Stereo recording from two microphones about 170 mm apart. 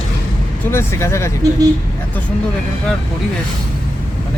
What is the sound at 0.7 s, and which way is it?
Speech, 15° left (ahead or behind).